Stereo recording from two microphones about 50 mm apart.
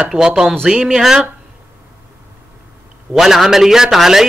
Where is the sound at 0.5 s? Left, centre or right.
Centre.